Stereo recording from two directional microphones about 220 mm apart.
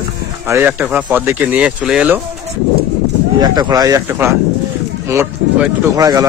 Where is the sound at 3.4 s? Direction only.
15° right (ahead or behind).